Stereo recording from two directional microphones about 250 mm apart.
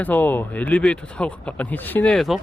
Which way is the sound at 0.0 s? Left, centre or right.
Centre.